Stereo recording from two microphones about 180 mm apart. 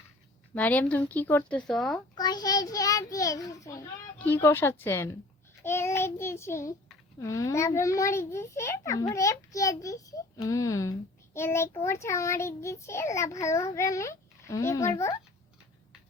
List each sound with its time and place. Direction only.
0.5 s a child's voice: 10° left (ahead or behind)
2.1 s a child's voice: 20° left (ahead or behind)